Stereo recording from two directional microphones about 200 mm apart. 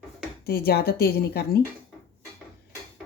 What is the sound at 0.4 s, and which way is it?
Speech, 50° left (ahead or behind).